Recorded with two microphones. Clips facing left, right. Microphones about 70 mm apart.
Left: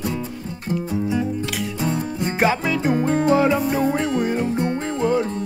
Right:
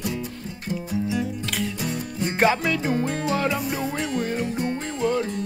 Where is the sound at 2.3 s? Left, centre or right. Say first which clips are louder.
Left 1 dB; centre.